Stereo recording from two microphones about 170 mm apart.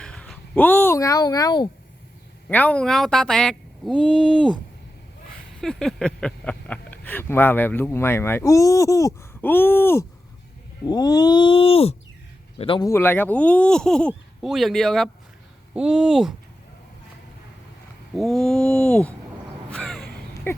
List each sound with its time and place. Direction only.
0.0 s speech: 5° left (ahead or behind); by 1.7 s 25° left (ahead or behind)
2.5 s speech: 10° left (ahead or behind)
5.5 s speech: 5° left (ahead or behind)
10.8 s a sound: 25° left (ahead or behind)
12.5 s a man's voice: 30° left (ahead or behind)
12.8 s speech: 15° left (ahead or behind); by 16.3 s 5° right (ahead or behind)
18.1 s speech: centre (ahead or behind)
19.7 s a sound: 5° left (ahead or behind)